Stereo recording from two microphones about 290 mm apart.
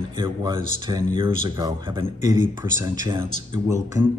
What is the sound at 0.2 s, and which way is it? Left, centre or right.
Speech, centre.